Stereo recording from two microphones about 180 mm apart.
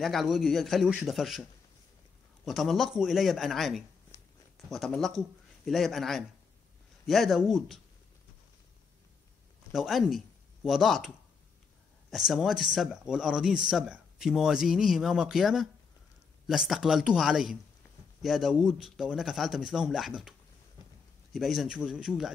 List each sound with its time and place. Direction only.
0.0 s speech: centre (ahead or behind)
4.1 s a sound: 20° left (ahead or behind)
4.6 s speech: centre (ahead or behind)
9.7 s speech: centre (ahead or behind)